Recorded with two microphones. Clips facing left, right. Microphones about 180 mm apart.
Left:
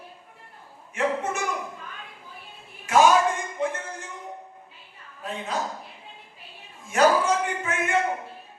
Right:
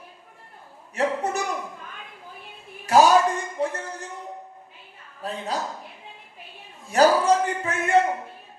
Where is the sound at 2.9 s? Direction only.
35° right (ahead or behind).